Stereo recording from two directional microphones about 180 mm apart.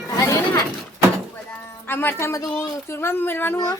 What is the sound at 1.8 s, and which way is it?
A woman's voice, 10° left (ahead or behind).